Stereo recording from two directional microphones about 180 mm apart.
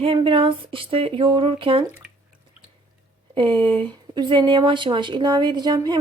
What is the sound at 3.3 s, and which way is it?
Speech, 25° right (ahead or behind).